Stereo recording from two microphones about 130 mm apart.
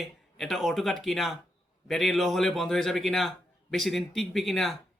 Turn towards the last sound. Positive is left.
turn(degrees=0)  # may be behind; listen again after turning